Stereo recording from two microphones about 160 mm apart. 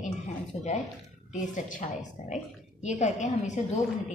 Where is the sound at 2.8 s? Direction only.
50° left (ahead or behind).